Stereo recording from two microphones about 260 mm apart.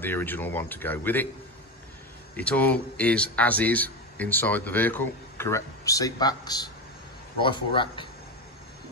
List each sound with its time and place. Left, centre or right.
0.0 s a man's voice: centre
2.3 s a man's voice: centre